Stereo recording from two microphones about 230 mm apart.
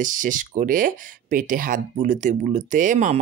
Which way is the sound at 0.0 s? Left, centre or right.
Right.